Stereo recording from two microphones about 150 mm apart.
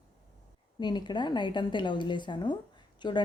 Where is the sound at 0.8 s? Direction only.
30° left (ahead or behind).